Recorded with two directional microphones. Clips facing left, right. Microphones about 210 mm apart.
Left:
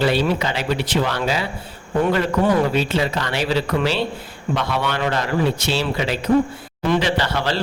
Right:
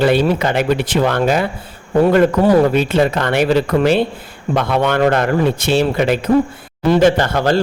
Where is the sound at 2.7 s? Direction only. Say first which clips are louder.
Right 6 dB; 55° right (ahead or behind).